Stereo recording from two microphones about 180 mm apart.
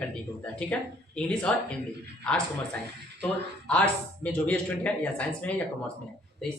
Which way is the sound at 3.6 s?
5° left (ahead or behind).